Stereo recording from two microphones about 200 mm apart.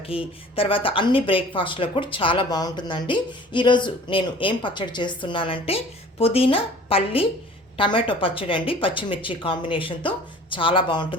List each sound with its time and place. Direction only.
0.0 s speech: 30° left (ahead or behind)